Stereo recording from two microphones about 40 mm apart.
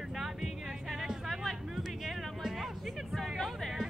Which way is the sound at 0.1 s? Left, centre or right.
Centre.